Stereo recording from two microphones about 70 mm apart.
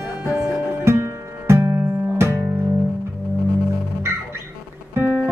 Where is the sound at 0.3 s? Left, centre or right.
Right.